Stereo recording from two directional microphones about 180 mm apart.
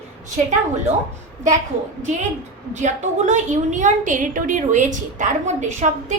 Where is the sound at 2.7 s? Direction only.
40° right (ahead or behind).